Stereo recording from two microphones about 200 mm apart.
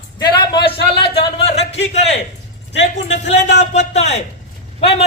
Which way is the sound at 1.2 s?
30° left (ahead or behind).